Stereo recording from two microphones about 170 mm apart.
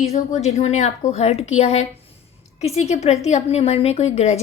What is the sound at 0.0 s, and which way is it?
A woman's voice, 40° left (ahead or behind).